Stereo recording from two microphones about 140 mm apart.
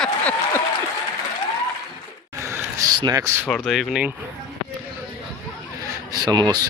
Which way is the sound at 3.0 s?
25° right (ahead or behind).